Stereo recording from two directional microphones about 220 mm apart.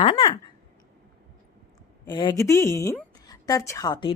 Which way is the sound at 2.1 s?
20° left (ahead or behind).